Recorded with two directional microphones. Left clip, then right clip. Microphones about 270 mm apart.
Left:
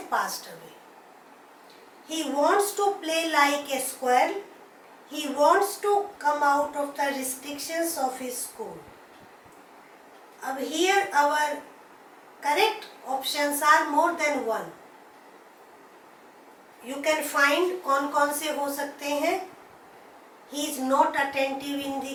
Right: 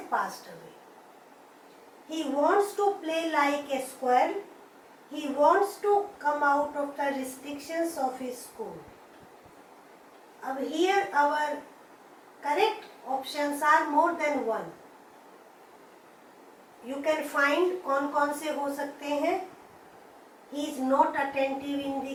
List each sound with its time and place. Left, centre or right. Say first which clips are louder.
0.1 s a woman's voice: left 2 dB; centre
2.1 s a woman's voice: left 2 dB; centre
8.6 s speech: left 1 dB; right
10.4 s a woman's voice: left 2 dB; centre
16.8 s a woman's voice: left 3 dB; centre
20.6 s a woman's voice: left 2 dB; centre